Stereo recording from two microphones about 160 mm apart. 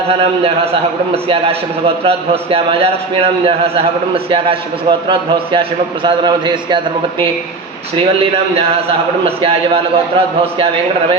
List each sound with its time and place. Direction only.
1.1 s a man's voice: 40° right (ahead or behind)
7.9 s a man's voice: 35° right (ahead or behind)